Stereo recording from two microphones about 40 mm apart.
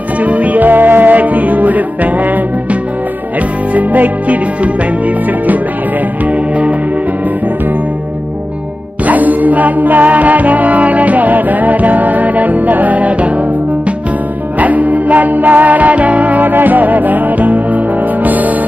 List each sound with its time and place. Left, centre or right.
0.2 s music: right
6.2 s music: right
9.0 s music: right
14.6 s music: right